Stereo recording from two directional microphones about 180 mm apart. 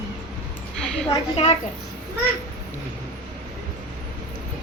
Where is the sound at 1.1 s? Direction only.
35° left (ahead or behind).